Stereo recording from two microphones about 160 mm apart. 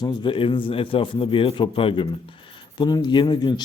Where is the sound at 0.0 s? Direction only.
30° left (ahead or behind).